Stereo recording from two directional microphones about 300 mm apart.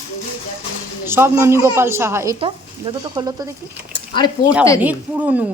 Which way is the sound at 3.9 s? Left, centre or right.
Centre.